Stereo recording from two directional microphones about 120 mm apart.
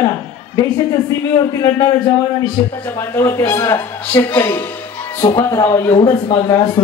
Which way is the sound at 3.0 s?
25° left (ahead or behind).